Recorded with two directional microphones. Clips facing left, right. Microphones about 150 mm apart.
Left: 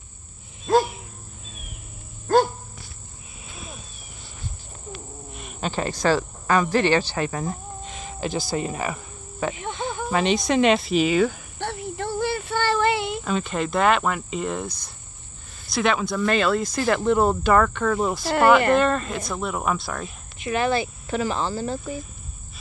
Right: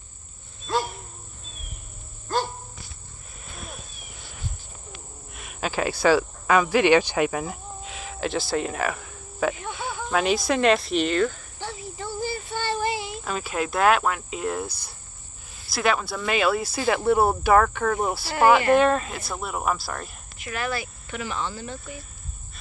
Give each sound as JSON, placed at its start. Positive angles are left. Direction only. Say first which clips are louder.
{"t": 5.3, "sound": "speech", "louder": "even", "side_deg": 0}
{"t": 9.7, "sound": "snake", "louder": "left 3 dB", "side_deg": -5}
{"t": 10.0, "sound": "cricket", "louder": "left 1 dB", "side_deg": 0}
{"t": 11.6, "sound": "a sound", "louder": "left 5 dB", "side_deg": 65}
{"t": 13.2, "sound": "cricket", "louder": "left 3 dB", "side_deg": -5}
{"t": 15.6, "sound": "speech", "louder": "left 2 dB", "side_deg": -5}
{"t": 18.3, "sound": "speech", "louder": "left 1 dB", "side_deg": 60}
{"t": 18.8, "sound": "cricket", "louder": "right 1 dB", "side_deg": -5}
{"t": 20.3, "sound": "speech", "louder": "left 7 dB", "side_deg": 25}